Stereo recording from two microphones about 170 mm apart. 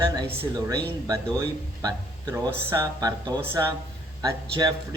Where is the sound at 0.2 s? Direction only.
20° right (ahead or behind).